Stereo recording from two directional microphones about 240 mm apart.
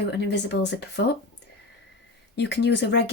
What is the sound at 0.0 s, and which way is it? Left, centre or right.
Speech, left.